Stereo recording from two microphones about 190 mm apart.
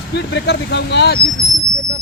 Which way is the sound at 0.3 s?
65° left (ahead or behind).